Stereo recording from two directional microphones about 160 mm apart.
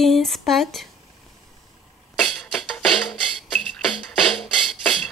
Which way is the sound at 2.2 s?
5° left (ahead or behind).